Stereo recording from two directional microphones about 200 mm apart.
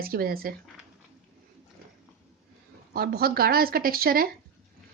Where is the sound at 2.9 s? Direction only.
50° right (ahead or behind).